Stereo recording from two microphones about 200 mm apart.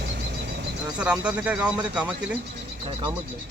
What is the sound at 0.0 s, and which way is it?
Vehicle, 55° right (ahead or behind).